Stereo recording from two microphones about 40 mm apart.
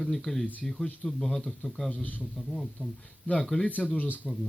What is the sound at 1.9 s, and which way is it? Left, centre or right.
Speech, left.